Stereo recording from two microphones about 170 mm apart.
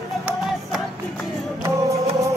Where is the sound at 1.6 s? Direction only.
20° right (ahead or behind).